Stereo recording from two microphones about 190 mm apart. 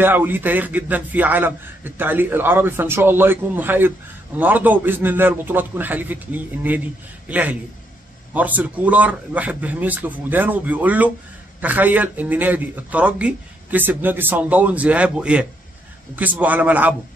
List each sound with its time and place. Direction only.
0.0 s a man's voice: 10° right (ahead or behind)